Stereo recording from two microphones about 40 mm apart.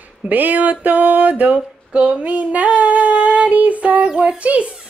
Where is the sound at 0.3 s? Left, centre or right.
Right.